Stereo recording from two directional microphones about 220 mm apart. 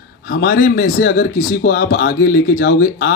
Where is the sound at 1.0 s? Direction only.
60° left (ahead or behind).